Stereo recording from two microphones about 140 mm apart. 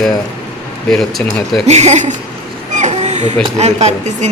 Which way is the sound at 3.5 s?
50° right (ahead or behind).